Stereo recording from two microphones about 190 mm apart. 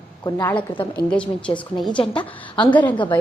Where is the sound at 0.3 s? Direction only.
15° left (ahead or behind).